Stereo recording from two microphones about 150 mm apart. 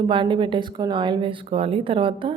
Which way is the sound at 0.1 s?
35° right (ahead or behind).